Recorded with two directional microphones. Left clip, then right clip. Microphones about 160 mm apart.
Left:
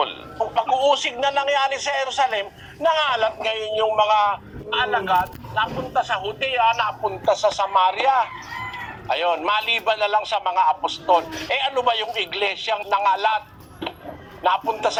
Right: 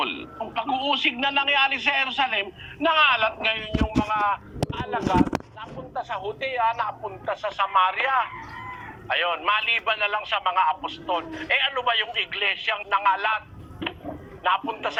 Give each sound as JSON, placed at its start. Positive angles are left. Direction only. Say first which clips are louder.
{"t": 0.0, "sound": "speech", "louder": "left 5 dB", "side_deg": 45}
{"t": 4.7, "sound": "speech", "louder": "left 6 dB", "side_deg": 5}
{"t": 7.1, "sound": "a man's voice", "louder": "left 10 dB", "side_deg": 30}
{"t": 14.4, "sound": "a man's voice", "louder": "left 4 dB", "side_deg": 30}